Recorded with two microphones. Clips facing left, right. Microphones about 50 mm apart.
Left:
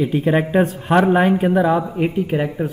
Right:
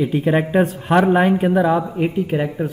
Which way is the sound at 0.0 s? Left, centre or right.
Centre.